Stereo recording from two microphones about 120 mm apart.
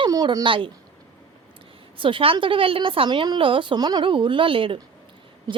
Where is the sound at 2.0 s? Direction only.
45° right (ahead or behind).